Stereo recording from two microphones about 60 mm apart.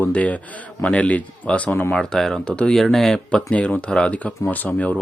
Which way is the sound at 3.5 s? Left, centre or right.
Left.